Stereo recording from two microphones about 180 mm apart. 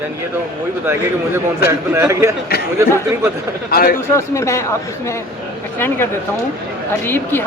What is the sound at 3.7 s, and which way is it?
Speech, 55° left (ahead or behind).